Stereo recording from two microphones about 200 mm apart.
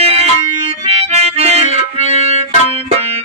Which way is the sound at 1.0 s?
30° right (ahead or behind).